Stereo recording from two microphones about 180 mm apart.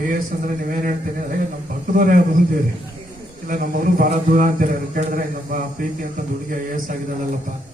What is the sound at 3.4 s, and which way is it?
Speech, 50° right (ahead or behind).